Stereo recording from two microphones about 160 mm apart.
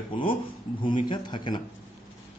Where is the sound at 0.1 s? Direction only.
35° left (ahead or behind).